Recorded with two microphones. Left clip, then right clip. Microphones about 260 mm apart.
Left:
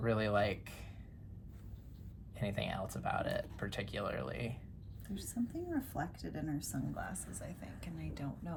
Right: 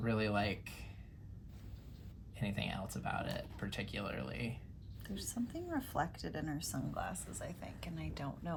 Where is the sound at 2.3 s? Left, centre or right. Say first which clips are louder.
Left 3 dB; centre.